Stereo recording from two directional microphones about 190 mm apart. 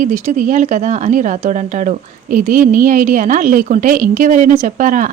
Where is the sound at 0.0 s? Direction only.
40° right (ahead or behind).